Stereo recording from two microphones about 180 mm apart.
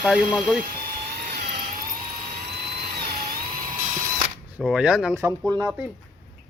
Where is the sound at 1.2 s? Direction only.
50° right (ahead or behind).